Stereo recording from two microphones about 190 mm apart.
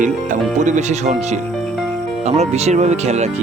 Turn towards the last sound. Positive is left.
turn(degrees=-35)  # may be behind; listen again after turning